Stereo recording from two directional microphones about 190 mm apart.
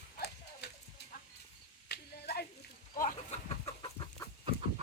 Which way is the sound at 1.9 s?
55° left (ahead or behind).